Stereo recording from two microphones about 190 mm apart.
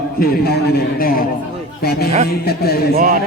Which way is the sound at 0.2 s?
55° left (ahead or behind).